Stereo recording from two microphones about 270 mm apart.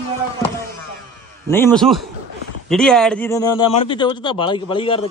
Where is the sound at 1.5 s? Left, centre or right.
Centre.